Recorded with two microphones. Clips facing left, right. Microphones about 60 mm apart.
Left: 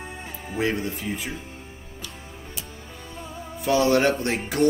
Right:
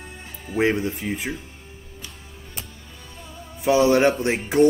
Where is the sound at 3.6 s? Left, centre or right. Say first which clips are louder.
Right 3 dB; centre.